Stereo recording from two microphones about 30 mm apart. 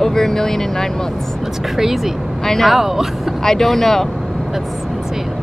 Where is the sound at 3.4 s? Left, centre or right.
Centre.